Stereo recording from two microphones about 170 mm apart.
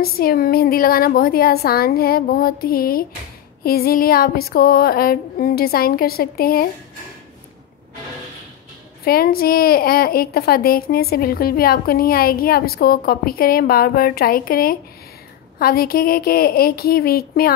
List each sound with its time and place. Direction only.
0.0 s a woman's voice: 60° left (ahead or behind)
9.0 s a woman's voice: 60° left (ahead or behind)